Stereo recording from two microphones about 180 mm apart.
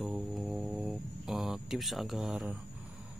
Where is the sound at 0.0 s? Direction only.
Centre (ahead or behind).